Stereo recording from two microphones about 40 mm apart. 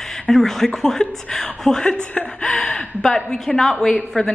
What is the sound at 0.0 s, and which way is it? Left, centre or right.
A woman's voice, centre.